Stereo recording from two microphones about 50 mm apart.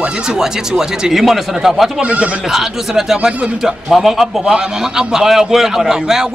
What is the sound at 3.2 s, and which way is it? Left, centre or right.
Speech, right.